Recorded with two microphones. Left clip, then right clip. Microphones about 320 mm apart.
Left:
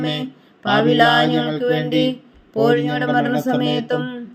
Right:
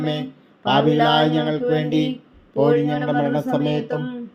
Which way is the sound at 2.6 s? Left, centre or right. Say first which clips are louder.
Left 1 dB; left.